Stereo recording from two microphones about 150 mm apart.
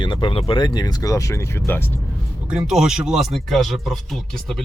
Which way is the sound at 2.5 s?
5° right (ahead or behind).